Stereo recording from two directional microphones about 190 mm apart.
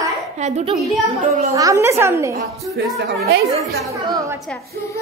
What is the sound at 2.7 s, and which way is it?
Speech, 60° right (ahead or behind).